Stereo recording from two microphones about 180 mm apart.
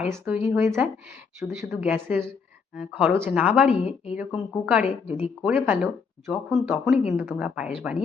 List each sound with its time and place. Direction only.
0.0 s speech: 10° right (ahead or behind)